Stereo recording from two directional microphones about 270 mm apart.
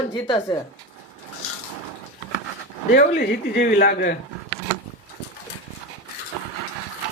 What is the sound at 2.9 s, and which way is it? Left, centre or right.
A man's voice, left.